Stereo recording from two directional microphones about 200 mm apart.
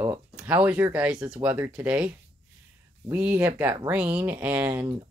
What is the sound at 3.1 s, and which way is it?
Speech, 10° right (ahead or behind).